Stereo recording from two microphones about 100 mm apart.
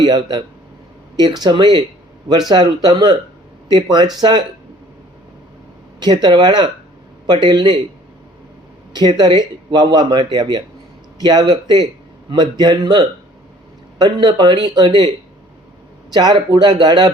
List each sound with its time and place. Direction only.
0.0 s speech: 45° right (ahead or behind)
6.0 s speech: 45° right (ahead or behind)
8.9 s speech: 45° right (ahead or behind)
16.1 s speech: 45° right (ahead or behind)